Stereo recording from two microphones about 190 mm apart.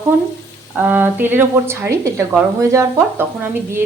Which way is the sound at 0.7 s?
10° right (ahead or behind).